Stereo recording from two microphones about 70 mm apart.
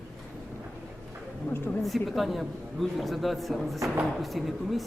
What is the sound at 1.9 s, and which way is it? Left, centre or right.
A man's voice, centre.